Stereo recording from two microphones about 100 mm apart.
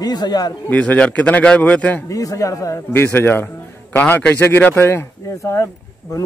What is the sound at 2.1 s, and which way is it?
Speech, 35° left (ahead or behind).